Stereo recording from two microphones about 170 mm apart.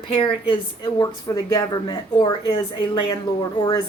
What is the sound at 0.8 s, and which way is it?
Speech, 20° left (ahead or behind).